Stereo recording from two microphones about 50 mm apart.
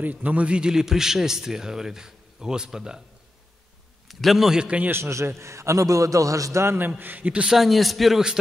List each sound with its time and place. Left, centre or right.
0.0 s a man's voice: right; by 3.0 s centre
4.1 s a man's voice: centre
4.6 s a man's voice: right
4.8 s a man's voice: right
5.2 s a man's voice: right
6.8 s a man's voice: right
7.4 s a man's voice: centre